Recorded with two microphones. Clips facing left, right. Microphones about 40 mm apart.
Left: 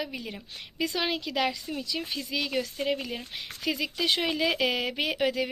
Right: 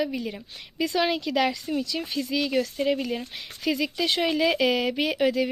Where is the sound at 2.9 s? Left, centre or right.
Centre.